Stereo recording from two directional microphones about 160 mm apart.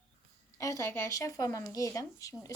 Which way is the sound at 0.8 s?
15° left (ahead or behind).